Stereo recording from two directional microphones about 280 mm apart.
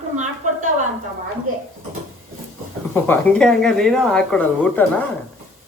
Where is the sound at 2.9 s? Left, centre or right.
Centre.